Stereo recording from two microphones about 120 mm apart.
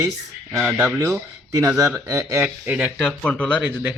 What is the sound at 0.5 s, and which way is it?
Speech, 15° right (ahead or behind).